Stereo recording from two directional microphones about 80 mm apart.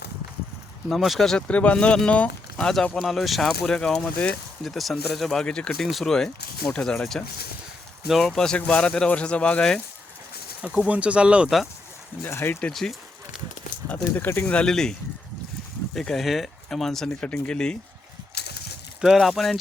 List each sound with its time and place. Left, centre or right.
0.9 s speech: centre
4.6 s speech: centre
10.6 s speech: centre
12.2 s speech: left
12.7 s speech: centre
13.8 s speech: left
14.4 s speech: centre
16.0 s speech: centre
19.0 s speech: centre